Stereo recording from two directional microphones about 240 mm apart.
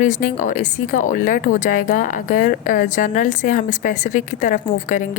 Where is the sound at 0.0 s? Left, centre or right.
Left.